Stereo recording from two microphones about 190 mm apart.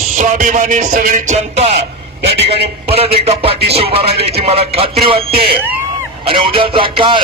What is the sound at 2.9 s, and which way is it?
A man's voice, 30° right (ahead or behind).